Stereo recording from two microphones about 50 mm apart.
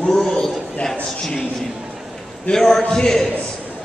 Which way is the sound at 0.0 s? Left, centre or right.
Centre.